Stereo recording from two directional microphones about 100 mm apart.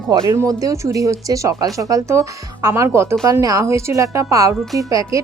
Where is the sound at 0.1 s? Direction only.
45° right (ahead or behind).